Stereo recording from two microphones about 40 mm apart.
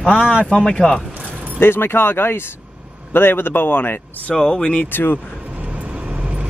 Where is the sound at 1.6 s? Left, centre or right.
Left.